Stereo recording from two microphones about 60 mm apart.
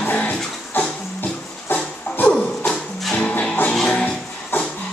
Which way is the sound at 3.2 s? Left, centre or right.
Centre.